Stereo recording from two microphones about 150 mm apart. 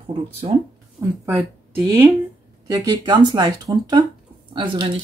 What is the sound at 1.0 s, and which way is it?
Speech, 20° right (ahead or behind).